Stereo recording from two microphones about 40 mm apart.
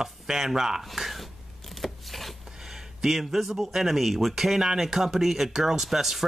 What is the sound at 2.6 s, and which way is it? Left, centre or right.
Speech, centre.